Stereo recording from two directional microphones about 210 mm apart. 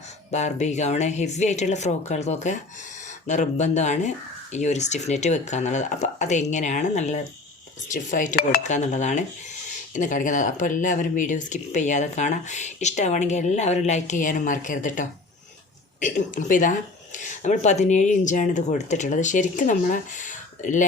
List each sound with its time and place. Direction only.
0.3 s speech: 35° left (ahead or behind)